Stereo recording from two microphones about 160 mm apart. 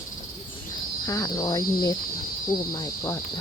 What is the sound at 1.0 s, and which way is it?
Speech, 20° left (ahead or behind).